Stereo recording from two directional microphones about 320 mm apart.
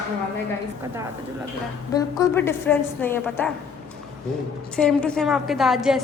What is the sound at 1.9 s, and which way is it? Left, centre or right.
A woman's voice, centre.